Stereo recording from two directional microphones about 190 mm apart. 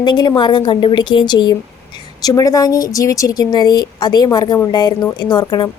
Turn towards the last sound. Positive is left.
turn(degrees=25)  # may be behind; listen again after turning